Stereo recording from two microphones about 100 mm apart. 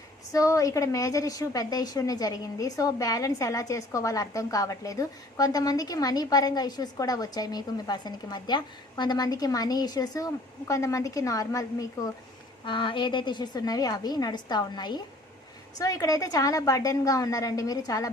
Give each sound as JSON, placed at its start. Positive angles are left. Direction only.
{"t": 0.3, "sound": "a woman's voice", "side_deg": 35}
{"t": 12.6, "sound": "a woman's voice", "side_deg": 55}
{"t": 15.8, "sound": "a woman's voice", "side_deg": 35}